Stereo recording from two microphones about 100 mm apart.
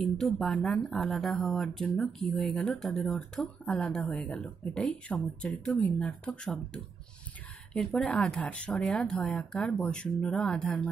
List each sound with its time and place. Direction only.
0.0 s speech: 5° left (ahead or behind)